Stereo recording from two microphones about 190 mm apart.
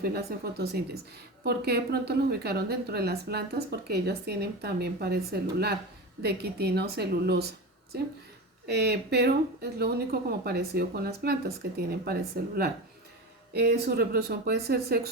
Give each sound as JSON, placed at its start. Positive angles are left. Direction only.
{"t": 0.0, "sound": "a woman's voice", "side_deg": -55}
{"t": 8.6, "sound": "a woman's voice", "side_deg": -60}